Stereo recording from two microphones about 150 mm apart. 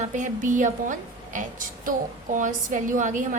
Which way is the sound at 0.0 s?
55° right (ahead or behind).